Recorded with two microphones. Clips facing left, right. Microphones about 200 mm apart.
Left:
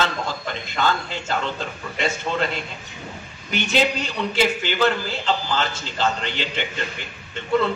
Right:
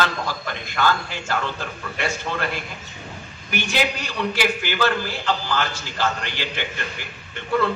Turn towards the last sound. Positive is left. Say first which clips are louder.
# left 1 dB
turn(degrees=25)  # may be behind; listen again after turning